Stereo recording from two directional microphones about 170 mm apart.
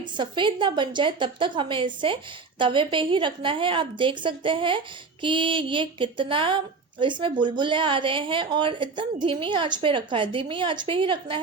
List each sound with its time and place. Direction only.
0.0 s a woman's voice: 30° right (ahead or behind)